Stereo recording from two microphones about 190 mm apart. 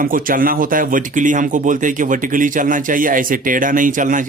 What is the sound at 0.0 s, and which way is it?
Speech, 45° right (ahead or behind).